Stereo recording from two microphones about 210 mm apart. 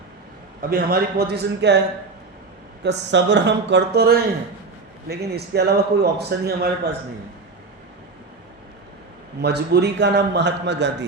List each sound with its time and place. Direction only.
0.7 s a man's voice: 45° right (ahead or behind)
2.8 s a man's voice: 55° right (ahead or behind)
9.4 s a man's voice: 50° right (ahead or behind)